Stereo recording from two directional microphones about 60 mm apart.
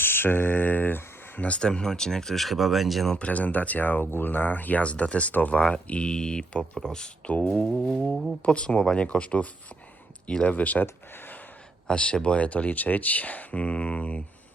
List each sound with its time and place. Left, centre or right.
0.0 s speech: left; by 3.2 s centre
3.2 s speech: left
7.3 s speech: left
7.9 s speech: centre
8.4 s speech: centre
10.8 s a sound: left
11.9 s speech: centre